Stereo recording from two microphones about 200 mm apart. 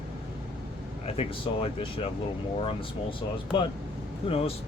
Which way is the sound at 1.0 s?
30° left (ahead or behind).